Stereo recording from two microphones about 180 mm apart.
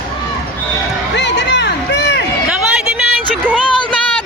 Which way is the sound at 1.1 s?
75° left (ahead or behind).